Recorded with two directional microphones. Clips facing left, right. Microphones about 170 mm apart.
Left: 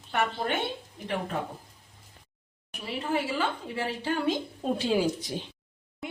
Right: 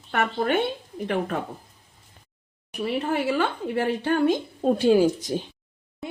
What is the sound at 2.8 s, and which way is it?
Speech, 60° right (ahead or behind).